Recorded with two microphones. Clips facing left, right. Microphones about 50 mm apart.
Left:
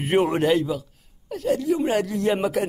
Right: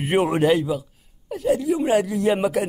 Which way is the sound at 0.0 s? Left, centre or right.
Centre.